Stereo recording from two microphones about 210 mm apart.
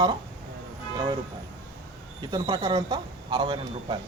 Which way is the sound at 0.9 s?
20° right (ahead or behind).